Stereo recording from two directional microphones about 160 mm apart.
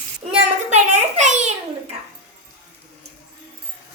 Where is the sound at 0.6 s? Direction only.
45° right (ahead or behind).